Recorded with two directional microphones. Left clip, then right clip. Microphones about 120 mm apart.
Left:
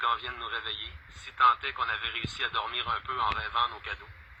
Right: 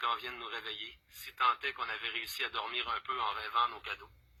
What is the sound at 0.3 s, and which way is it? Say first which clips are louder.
Speech: left 6 dB; 25° left (ahead or behind).